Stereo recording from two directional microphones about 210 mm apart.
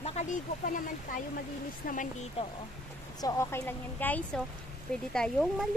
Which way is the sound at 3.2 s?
15° left (ahead or behind).